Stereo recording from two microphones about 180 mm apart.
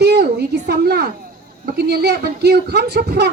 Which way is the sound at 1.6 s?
60° right (ahead or behind).